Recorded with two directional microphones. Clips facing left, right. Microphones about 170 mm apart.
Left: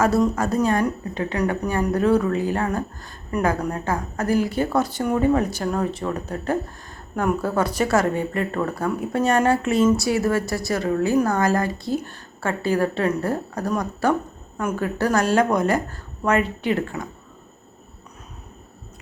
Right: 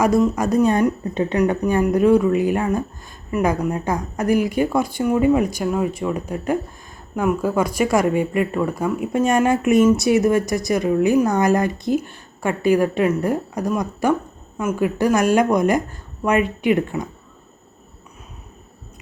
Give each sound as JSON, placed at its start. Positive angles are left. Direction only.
{"t": 0.3, "sound": "speech", "side_deg": -15}